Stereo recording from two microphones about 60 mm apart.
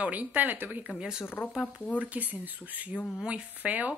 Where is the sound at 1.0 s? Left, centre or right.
Centre.